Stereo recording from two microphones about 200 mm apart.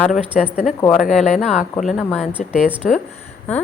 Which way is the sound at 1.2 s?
35° left (ahead or behind).